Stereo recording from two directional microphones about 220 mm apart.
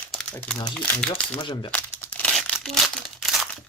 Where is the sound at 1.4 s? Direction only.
20° left (ahead or behind).